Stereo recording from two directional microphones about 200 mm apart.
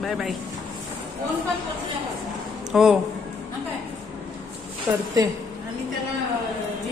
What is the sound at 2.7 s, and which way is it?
Speech, centre (ahead or behind).